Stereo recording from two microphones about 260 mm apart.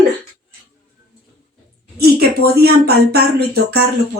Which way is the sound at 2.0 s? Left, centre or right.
Right.